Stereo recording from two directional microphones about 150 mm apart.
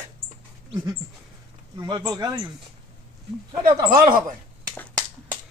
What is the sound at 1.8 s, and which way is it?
Speech, 25° right (ahead or behind).